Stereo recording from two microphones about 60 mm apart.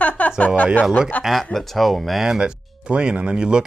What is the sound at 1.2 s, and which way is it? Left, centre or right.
Speech, centre.